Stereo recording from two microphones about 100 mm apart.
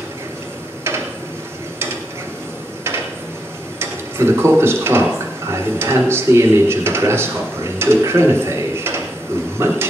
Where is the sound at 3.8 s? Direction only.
25° right (ahead or behind).